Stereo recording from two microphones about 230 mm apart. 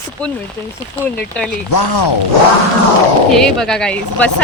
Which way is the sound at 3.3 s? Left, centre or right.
Centre.